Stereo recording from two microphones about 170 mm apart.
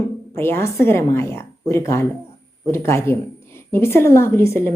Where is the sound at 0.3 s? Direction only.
15° left (ahead or behind).